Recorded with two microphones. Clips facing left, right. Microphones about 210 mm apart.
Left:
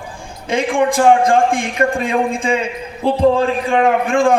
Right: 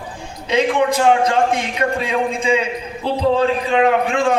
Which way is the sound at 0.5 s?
50° left (ahead or behind).